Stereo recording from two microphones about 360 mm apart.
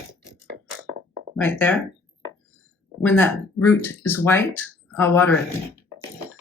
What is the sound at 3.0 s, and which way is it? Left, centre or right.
Speech, centre.